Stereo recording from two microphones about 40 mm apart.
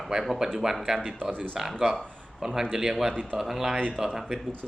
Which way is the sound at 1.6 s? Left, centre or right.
Centre.